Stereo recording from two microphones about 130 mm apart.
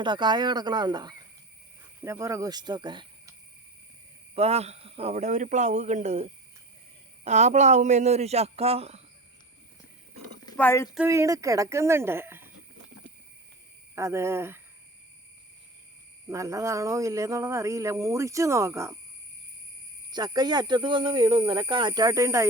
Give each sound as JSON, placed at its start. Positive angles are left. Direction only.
{"t": 0.0, "sound": "speech", "side_deg": -35}
{"t": 2.0, "sound": "speech", "side_deg": -20}
{"t": 4.4, "sound": "speech", "side_deg": -55}
{"t": 10.6, "sound": "speech", "side_deg": 20}
{"t": 11.1, "sound": "speech", "side_deg": -25}
{"t": 13.9, "sound": "speech", "side_deg": -20}
{"t": 16.3, "sound": "speech", "side_deg": -25}
{"t": 20.1, "sound": "speech", "side_deg": -30}